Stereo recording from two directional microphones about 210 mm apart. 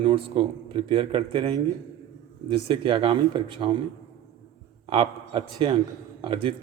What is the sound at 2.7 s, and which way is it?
Speech, 25° right (ahead or behind).